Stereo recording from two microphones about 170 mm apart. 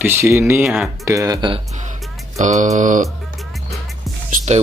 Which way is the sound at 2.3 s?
45° right (ahead or behind).